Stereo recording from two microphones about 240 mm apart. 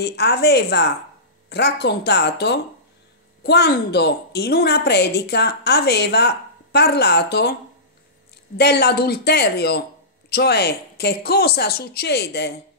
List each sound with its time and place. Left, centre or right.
0.0 s a woman's voice: left
8.5 s a woman's voice: left